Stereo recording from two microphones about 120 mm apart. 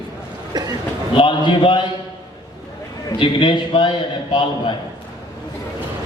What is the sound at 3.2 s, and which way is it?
A man's voice, 45° left (ahead or behind).